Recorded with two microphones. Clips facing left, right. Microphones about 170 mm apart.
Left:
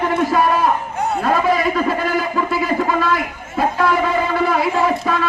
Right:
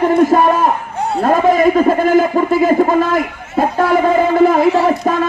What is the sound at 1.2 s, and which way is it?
A man's voice, 45° right (ahead or behind).